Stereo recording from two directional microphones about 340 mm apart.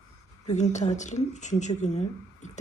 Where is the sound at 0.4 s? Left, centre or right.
Left.